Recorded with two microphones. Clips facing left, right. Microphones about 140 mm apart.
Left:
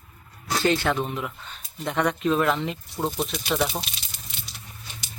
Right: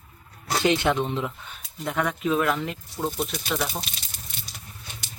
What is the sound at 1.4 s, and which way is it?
Speech, 5° right (ahead or behind).